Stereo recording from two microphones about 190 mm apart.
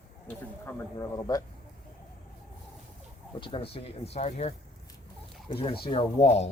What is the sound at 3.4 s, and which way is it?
Speech, 25° left (ahead or behind).